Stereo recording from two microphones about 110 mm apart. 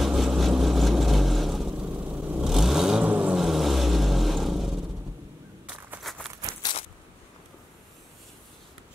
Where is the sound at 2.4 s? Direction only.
5° right (ahead or behind).